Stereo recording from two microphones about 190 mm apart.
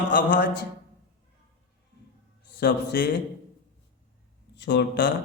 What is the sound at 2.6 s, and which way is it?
Speech, 65° left (ahead or behind).